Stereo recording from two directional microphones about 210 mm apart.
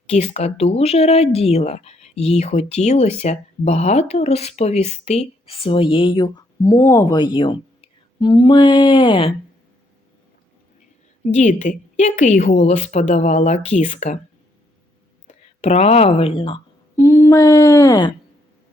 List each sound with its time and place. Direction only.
0.1 s speech: 30° left (ahead or behind)
11.3 s speech: 35° left (ahead or behind)
15.6 s speech: 30° left (ahead or behind)
17.0 s a sound: 15° left (ahead or behind)